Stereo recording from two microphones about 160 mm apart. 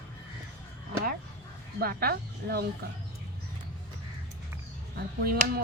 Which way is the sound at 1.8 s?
70° right (ahead or behind).